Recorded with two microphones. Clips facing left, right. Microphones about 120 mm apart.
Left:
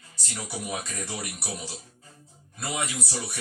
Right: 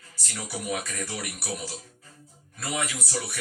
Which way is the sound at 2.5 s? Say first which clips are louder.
Even; 25° left (ahead or behind).